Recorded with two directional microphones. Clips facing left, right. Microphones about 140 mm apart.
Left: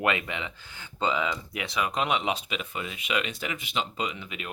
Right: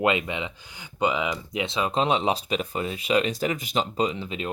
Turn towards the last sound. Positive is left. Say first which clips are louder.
# right 7 dB
turn(degrees=-30)  # may be behind; listen again after turning